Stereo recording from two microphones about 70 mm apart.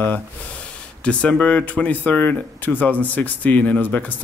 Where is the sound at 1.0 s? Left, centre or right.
Centre.